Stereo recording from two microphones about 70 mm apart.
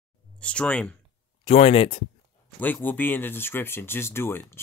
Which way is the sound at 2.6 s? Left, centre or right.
Left.